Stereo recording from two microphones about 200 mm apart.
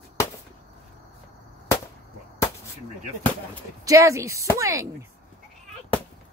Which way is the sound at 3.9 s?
15° right (ahead or behind).